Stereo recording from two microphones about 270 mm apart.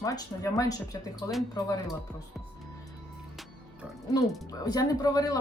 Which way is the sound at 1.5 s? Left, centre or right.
Centre.